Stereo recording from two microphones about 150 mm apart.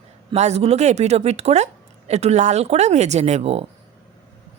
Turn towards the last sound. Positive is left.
turn(degrees=-45)  # may be behind; listen again after turning